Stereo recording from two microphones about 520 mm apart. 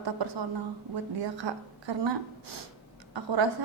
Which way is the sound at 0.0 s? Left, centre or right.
Right.